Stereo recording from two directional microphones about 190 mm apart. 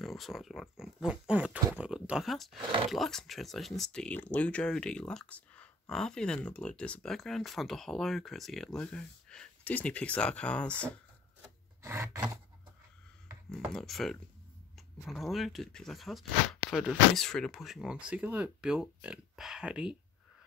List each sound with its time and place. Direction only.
0.0 s speech: centre (ahead or behind)
11.8 s rub: 15° right (ahead or behind)
13.5 s speech: centre (ahead or behind)